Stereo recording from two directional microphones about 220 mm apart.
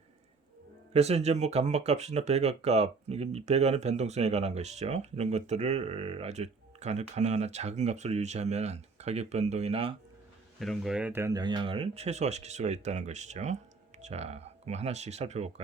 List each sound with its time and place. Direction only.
0.9 s speech: 30° right (ahead or behind)
10.6 s speech: centre (ahead or behind); by 15.6 s 30° right (ahead or behind)